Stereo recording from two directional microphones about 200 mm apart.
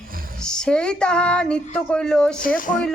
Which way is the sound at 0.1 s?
45° right (ahead or behind).